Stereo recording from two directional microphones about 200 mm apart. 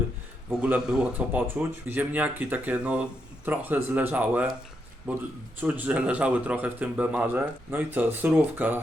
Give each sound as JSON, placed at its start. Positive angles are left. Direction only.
{"t": 0.6, "sound": "speech", "side_deg": -5}